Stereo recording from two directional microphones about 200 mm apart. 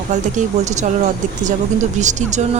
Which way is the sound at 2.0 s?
35° right (ahead or behind).